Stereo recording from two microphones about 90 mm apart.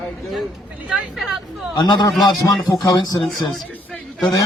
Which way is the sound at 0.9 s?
5° right (ahead or behind).